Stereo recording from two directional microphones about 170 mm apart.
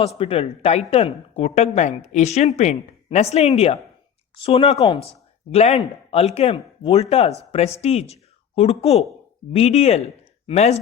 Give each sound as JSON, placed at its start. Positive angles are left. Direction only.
{"t": 0.2, "sound": "speech", "side_deg": 35}